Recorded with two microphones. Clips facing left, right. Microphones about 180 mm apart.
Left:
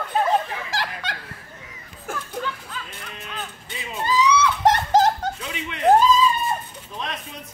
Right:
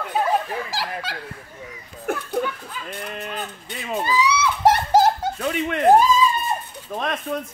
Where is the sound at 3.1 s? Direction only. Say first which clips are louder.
Right 5 dB; 55° right (ahead or behind).